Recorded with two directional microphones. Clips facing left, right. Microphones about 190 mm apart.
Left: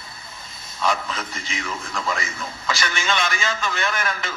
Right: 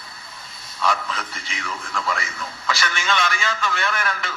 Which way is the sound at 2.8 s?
25° left (ahead or behind).